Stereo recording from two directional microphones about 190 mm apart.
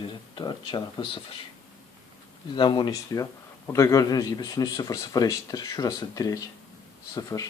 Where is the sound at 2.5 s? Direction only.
25° left (ahead or behind).